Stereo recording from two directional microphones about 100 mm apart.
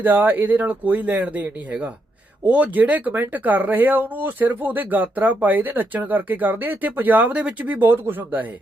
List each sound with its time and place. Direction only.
0.0 s speech: 20° right (ahead or behind)